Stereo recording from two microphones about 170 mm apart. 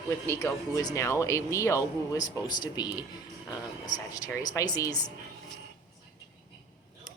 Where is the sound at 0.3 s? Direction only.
20° left (ahead or behind).